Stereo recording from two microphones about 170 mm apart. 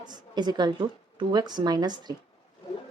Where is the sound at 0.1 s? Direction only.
25° right (ahead or behind).